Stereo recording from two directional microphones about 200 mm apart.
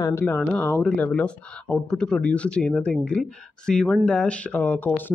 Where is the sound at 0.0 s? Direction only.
10° left (ahead or behind).